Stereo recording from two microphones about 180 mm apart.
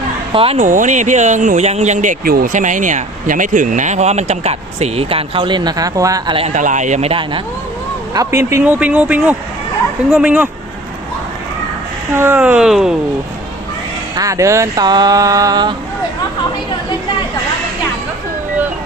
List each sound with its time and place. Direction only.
0.3 s speech: 35° right (ahead or behind)
6.5 s speech: 45° right (ahead or behind)
8.1 s speech: 20° right (ahead or behind)
12.1 s speech: 15° right (ahead or behind)
14.2 s a sound: 15° right (ahead or behind)